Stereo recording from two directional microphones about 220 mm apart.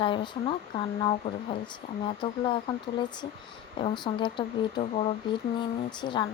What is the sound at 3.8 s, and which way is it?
Speech, 20° left (ahead or behind).